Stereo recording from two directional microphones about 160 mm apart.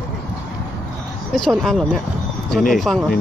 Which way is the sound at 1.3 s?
Centre (ahead or behind).